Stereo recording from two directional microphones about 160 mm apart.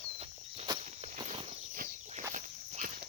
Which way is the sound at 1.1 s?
35° right (ahead or behind).